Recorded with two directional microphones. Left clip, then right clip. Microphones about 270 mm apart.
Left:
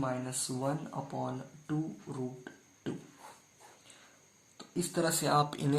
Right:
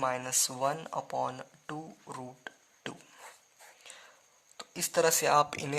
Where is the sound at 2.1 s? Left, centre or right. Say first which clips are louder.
Right 1 dB; right.